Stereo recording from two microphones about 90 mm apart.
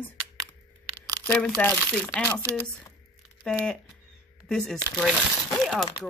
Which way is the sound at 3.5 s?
10° left (ahead or behind).